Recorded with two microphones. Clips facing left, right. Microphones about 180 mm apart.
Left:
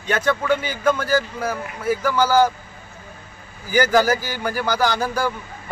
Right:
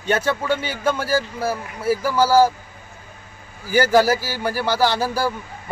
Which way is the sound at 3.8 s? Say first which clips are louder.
Right 1 dB; 30° right (ahead or behind).